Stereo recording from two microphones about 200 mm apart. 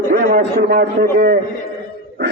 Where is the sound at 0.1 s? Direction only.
45° right (ahead or behind).